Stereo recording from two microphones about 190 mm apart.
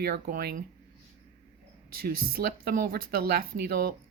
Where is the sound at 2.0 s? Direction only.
55° right (ahead or behind).